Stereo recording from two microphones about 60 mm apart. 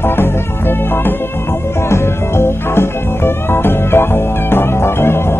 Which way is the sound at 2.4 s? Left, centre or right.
Left.